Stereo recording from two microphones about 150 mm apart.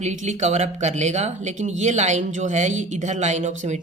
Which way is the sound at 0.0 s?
50° right (ahead or behind).